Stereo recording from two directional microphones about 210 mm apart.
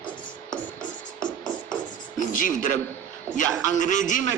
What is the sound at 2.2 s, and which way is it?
Speech, 40° left (ahead or behind).